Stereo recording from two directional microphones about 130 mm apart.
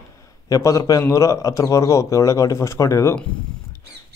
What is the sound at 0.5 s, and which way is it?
Speech, 25° left (ahead or behind).